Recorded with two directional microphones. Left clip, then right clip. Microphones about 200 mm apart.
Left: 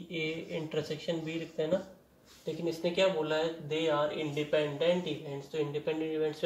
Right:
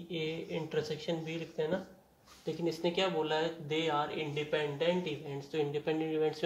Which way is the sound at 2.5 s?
55° right (ahead or behind).